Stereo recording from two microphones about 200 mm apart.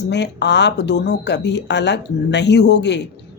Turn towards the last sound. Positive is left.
turn(degrees=60)  # may be behind; listen again after turning